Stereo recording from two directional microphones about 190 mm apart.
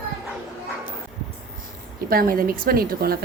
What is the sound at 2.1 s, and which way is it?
A woman's voice, 50° right (ahead or behind).